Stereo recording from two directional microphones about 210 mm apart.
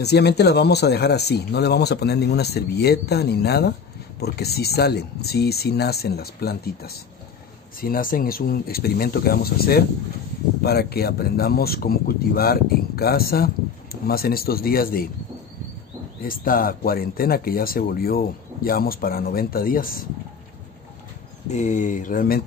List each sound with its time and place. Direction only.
0.0 s speech: 50° left (ahead or behind)
16.2 s speech: 40° left (ahead or behind)
21.5 s speech: 35° left (ahead or behind)